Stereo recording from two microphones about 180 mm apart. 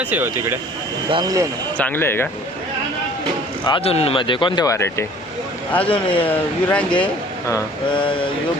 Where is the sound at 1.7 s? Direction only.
10° left (ahead or behind).